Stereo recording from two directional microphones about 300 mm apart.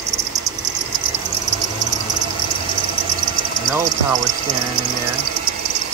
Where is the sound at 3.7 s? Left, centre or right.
Centre.